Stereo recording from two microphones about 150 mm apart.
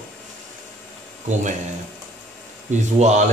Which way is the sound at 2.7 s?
50° right (ahead or behind).